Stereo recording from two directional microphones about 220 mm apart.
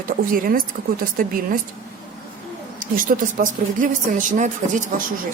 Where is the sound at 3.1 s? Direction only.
35° right (ahead or behind).